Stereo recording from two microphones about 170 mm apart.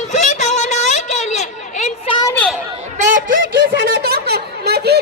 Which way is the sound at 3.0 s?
50° right (ahead or behind).